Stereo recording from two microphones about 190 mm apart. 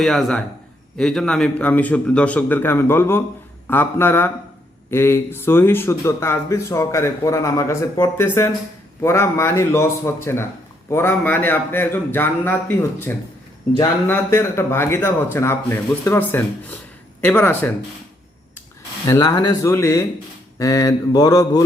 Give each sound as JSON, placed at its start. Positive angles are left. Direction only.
{"t": 0.0, "sound": "a man's voice", "side_deg": 0}
{"t": 19.0, "sound": "a man's voice", "side_deg": 15}
{"t": 20.6, "sound": "mantra", "side_deg": 20}